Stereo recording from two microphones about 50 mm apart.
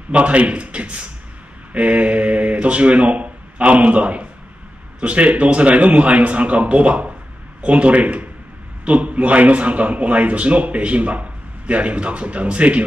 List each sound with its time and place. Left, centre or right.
0.1 s a man's voice: right